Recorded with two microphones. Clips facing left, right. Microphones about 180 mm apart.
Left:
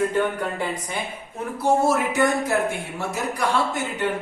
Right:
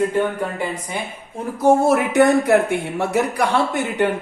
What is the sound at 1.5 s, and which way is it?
Speech, 55° right (ahead or behind).